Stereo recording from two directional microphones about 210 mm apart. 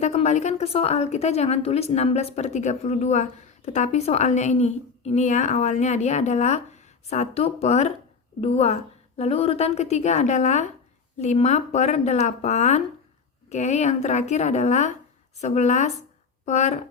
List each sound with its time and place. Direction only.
0.0 s a woman's voice: 30° left (ahead or behind)